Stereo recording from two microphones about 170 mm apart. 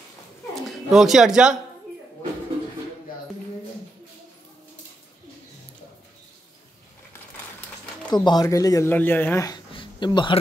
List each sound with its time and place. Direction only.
0.6 s speech: centre (ahead or behind)
8.1 s speech: 25° left (ahead or behind)
9.7 s a sound: 30° left (ahead or behind)